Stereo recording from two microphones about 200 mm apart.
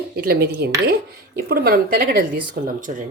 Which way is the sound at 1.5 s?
45° right (ahead or behind).